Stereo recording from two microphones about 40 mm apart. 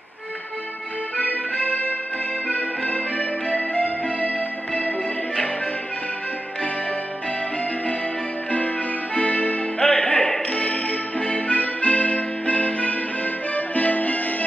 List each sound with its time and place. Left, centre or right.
1.1 s accordion: left
2.4 s music: left
8.5 s music: left
9.8 s music: left